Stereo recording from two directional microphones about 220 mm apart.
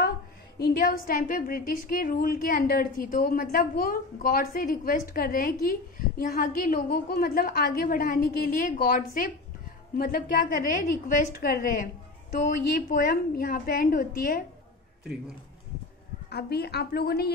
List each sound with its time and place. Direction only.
0.6 s a woman's voice: 40° left (ahead or behind)
16.3 s a woman's voice: 45° left (ahead or behind)